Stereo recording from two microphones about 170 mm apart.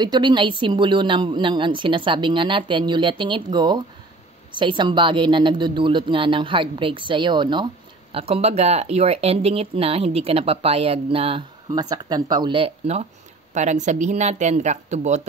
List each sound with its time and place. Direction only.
0.0 s a woman's voice: 25° right (ahead or behind)
11.7 s a woman's voice: 20° right (ahead or behind); by 15.2 s 45° right (ahead or behind)